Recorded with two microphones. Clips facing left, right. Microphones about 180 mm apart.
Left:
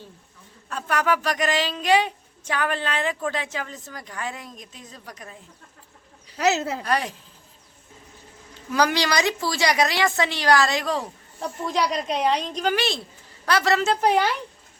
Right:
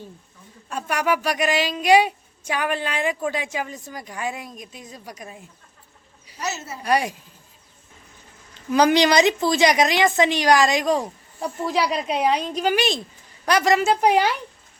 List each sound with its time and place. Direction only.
0.7 s a woman's voice: 10° right (ahead or behind)
6.3 s speech: 75° left (ahead or behind)
6.8 s a woman's voice: 10° right (ahead or behind)
8.7 s a woman's voice: 20° right (ahead or behind)